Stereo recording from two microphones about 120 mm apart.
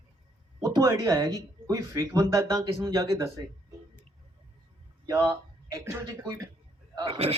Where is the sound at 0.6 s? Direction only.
30° right (ahead or behind).